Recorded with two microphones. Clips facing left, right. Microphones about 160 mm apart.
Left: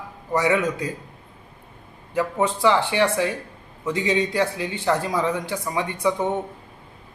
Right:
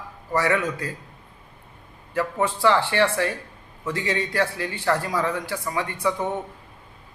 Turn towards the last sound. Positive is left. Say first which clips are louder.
# left 3 dB
turn(degrees=20)  # may be behind; listen again after turning